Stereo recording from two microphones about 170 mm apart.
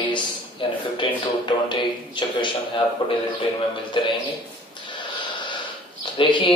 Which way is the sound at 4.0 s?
30° left (ahead or behind).